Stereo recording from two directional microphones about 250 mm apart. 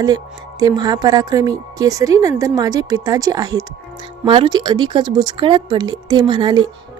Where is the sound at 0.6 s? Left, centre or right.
Centre.